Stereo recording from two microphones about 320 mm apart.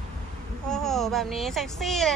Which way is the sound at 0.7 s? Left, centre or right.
Centre.